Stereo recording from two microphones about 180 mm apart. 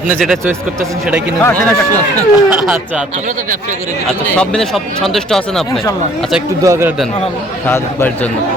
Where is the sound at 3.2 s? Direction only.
45° right (ahead or behind).